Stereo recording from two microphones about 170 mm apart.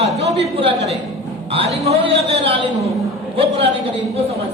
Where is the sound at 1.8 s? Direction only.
35° right (ahead or behind).